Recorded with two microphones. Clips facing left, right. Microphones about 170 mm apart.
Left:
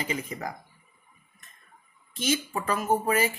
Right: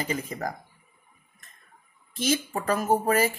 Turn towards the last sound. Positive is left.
turn(degrees=-40)  # may be behind; listen again after turning